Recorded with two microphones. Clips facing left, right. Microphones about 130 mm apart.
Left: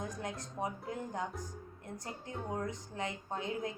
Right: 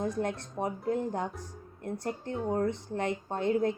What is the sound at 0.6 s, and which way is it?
Speech, 60° right (ahead or behind).